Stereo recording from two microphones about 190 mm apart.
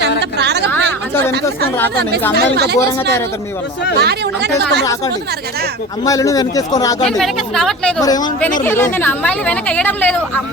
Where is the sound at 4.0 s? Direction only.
60° right (ahead or behind).